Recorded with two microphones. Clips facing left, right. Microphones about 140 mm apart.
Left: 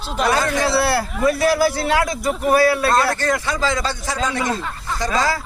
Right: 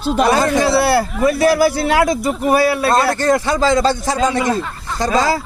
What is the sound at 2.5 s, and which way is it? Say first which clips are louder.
A man's voice: right 1 dB; 20° right (ahead or behind).